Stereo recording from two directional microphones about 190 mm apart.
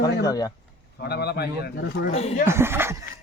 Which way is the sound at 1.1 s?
60° left (ahead or behind).